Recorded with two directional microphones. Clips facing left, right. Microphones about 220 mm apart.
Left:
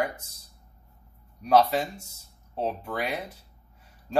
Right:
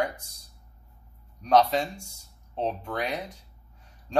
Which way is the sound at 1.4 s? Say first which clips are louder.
Even; 5° left (ahead or behind).